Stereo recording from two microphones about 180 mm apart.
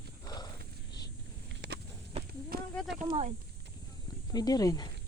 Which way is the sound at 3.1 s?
35° right (ahead or behind).